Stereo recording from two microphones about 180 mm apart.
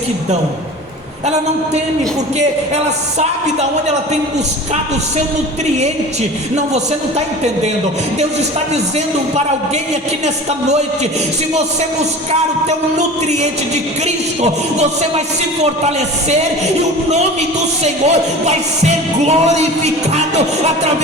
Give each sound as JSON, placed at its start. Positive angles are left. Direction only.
{"t": 2.7, "sound": "music", "side_deg": -40}
{"t": 12.3, "sound": "music", "side_deg": -40}
{"t": 17.8, "sound": "music", "side_deg": -35}